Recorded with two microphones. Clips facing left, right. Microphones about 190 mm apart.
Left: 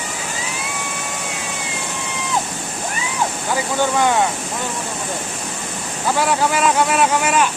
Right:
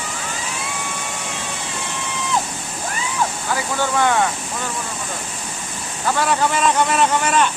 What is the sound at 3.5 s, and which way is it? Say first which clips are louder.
Speech: left 3 dB; 15° left (ahead or behind).